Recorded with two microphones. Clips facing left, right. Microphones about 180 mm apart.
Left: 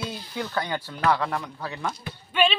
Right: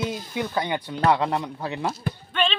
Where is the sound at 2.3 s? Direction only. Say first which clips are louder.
Left 3 dB; 10° left (ahead or behind).